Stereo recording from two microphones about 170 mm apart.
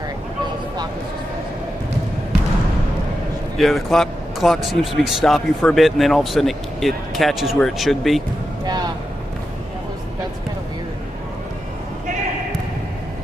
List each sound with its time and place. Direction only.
3.5 s speech: centre (ahead or behind)
8.6 s vehicle: 25° right (ahead or behind)